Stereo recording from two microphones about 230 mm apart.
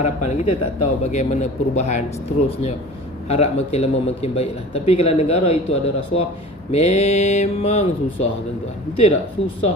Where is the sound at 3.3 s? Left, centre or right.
Left.